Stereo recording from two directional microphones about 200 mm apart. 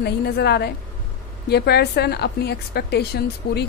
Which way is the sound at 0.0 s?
55° left (ahead or behind).